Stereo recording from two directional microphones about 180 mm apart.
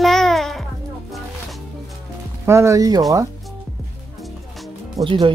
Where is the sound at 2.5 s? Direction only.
15° right (ahead or behind).